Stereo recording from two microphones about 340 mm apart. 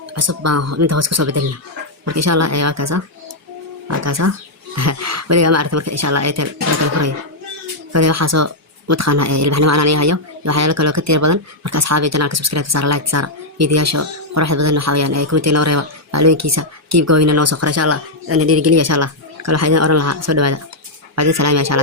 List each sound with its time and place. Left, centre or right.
0.1 s speech: right